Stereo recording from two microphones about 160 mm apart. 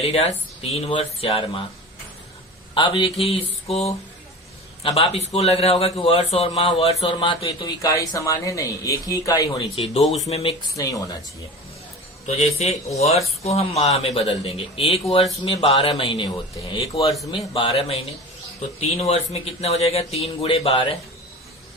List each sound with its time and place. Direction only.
0.0 s a man's voice: 40° left (ahead or behind)
2.7 s a man's voice: 35° left (ahead or behind)
7.6 s speech: 20° left (ahead or behind)
9.6 s a man's voice: 40° left (ahead or behind)
10.0 s speech: centre (ahead or behind)
10.2 s a man's voice: 40° left (ahead or behind)
10.8 s speech: 20° left (ahead or behind)
12.2 s a man's voice: 40° left (ahead or behind)